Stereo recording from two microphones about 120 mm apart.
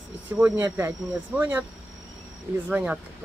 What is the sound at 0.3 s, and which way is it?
Speech, 15° right (ahead or behind).